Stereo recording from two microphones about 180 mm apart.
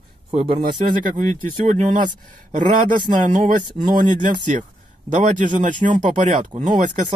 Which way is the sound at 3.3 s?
45° right (ahead or behind).